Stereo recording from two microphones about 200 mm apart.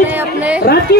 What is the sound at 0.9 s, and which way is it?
Speech, 50° left (ahead or behind).